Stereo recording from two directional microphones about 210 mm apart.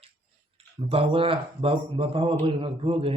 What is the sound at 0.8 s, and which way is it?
Speech, 25° right (ahead or behind).